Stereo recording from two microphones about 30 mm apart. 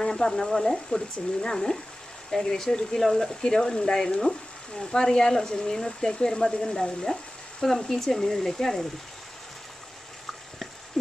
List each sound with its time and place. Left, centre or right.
0.0 s speech: centre
2.3 s speech: centre
3.5 s speech: left
6.6 s speech: centre